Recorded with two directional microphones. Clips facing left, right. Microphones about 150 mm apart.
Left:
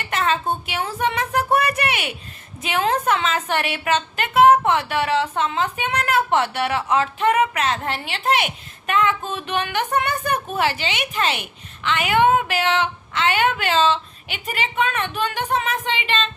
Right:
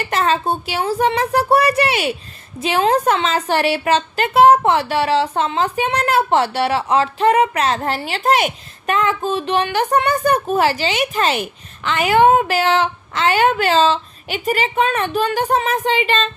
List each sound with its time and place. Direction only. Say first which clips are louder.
0.0 s a woman's voice: right 4 dB; 35° right (ahead or behind)